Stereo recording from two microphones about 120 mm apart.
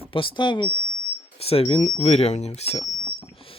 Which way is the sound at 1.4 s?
55° left (ahead or behind).